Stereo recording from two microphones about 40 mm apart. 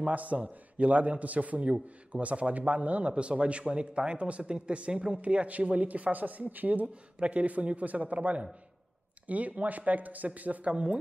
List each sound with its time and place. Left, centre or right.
0.1 s a man's voice: right